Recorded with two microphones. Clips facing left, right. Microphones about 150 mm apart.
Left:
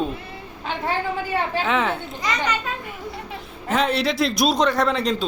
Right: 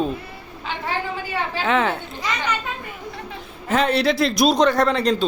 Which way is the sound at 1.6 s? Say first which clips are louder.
Right 4 dB; centre (ahead or behind).